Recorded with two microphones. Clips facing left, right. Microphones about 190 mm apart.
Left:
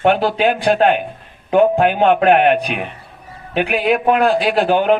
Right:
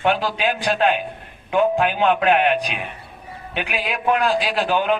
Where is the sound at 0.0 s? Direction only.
55° left (ahead or behind).